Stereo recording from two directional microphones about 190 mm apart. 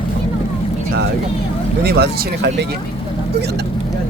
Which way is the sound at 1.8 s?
60° right (ahead or behind).